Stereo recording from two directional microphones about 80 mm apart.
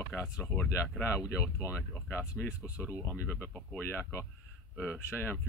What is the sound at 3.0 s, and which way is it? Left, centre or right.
Speech, left.